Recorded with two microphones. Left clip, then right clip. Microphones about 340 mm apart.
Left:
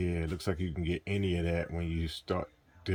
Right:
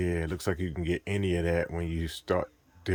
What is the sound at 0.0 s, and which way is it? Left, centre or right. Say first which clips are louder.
Speech: right 4 dB; centre.